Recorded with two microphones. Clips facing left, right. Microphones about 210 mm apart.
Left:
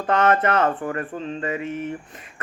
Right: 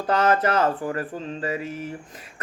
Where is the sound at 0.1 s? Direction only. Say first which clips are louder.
Left 1 dB; centre (ahead or behind).